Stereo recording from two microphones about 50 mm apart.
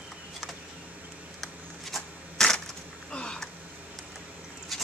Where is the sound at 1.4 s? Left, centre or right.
Centre.